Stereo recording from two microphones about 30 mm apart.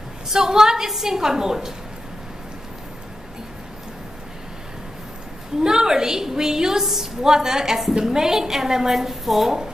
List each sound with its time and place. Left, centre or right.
0.3 s a woman's voice: centre
5.6 s a woman's voice: centre